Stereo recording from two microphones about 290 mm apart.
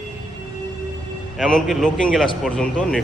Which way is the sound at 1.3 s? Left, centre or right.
Centre.